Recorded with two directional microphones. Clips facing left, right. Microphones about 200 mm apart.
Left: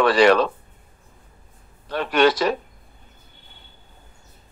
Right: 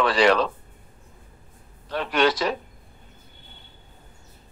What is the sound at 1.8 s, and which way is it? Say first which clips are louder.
Speech: left 4 dB; 60° left (ahead or behind).